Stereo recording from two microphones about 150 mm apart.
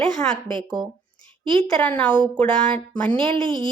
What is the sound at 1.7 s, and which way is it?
Speech, 5° left (ahead or behind).